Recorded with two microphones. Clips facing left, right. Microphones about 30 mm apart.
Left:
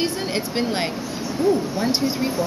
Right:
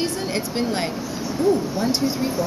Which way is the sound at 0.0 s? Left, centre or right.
Centre.